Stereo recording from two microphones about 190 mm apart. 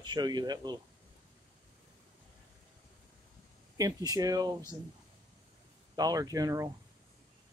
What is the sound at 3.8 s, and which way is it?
Speech, 20° right (ahead or behind).